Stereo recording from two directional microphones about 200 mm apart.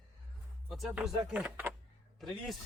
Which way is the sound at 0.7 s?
Centre (ahead or behind).